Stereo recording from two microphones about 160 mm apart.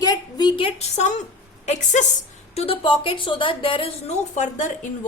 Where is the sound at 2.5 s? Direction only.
35° left (ahead or behind).